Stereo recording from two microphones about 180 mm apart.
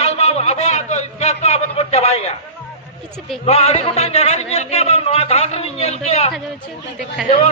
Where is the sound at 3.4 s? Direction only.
35° left (ahead or behind).